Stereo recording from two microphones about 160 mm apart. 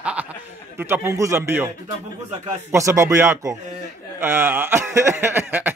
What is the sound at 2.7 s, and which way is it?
A man's voice, 20° right (ahead or behind).